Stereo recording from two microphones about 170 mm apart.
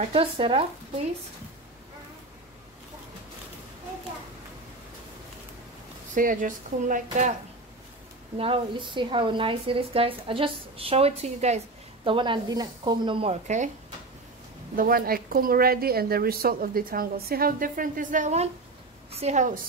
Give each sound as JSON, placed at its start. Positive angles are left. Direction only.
{"t": 0.0, "sound": "a woman's voice", "side_deg": -35}
{"t": 6.1, "sound": "speech", "side_deg": -50}
{"t": 8.4, "sound": "a woman's voice", "side_deg": -30}
{"t": 14.8, "sound": "a woman's voice", "side_deg": -60}